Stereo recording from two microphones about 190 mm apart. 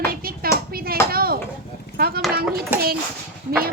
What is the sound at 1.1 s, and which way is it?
Speech, 50° right (ahead or behind).